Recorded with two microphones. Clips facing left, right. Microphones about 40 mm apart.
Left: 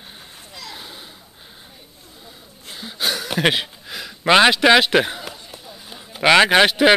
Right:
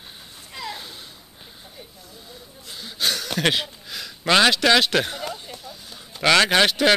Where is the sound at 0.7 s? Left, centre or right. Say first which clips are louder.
Left 1 dB; centre.